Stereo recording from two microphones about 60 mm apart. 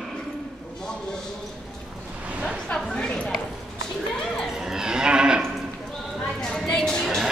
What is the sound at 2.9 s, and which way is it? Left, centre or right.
Clip-clop, centre.